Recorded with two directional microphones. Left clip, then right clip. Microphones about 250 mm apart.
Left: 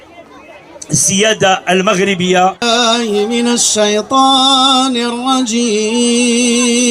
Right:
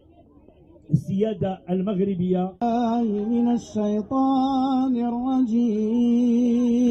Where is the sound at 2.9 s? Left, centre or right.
Centre.